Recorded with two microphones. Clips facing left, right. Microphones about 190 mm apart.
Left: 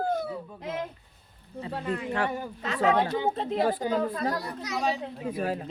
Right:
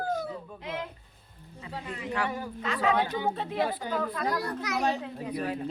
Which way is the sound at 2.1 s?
40° left (ahead or behind).